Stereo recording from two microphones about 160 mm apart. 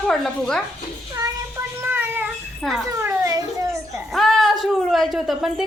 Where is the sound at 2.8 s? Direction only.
15° right (ahead or behind).